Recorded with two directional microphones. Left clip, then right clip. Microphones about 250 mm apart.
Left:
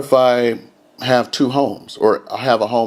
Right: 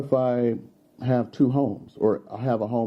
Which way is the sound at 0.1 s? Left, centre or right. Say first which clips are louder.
Left 10 dB; centre.